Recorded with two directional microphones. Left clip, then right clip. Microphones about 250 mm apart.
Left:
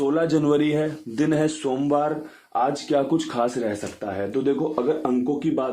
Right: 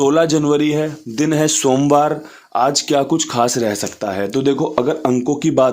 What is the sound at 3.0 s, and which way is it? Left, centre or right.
Speech, right.